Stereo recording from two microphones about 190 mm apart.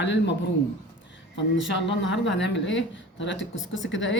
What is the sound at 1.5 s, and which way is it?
Speech, 70° left (ahead or behind).